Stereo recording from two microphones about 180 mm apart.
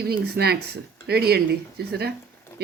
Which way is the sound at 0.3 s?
60° right (ahead or behind).